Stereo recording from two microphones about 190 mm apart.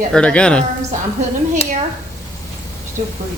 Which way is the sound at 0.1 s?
5° left (ahead or behind).